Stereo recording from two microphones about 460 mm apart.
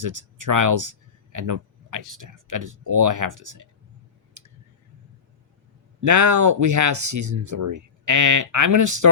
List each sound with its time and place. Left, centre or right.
0.0 s speech: right
4.4 s tick: right
6.0 s speech: right